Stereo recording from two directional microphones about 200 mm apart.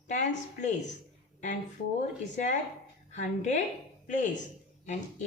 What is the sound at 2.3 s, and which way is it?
Speech, 35° left (ahead or behind).